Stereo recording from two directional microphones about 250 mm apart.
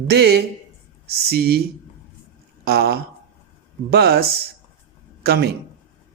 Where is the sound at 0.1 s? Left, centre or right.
Right.